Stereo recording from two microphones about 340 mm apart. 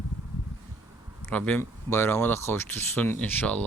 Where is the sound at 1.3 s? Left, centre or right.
Centre.